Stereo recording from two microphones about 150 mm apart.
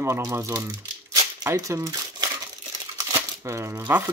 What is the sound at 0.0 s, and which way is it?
Speech, 20° right (ahead or behind).